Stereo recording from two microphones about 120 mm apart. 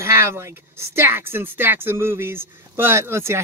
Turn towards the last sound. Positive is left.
turn(degrees=-20)  # may be behind; listen again after turning